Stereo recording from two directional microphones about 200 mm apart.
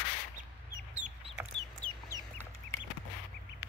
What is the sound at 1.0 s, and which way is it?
Chicken, 35° right (ahead or behind).